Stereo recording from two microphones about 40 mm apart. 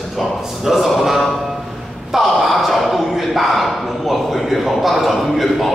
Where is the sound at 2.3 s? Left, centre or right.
Centre.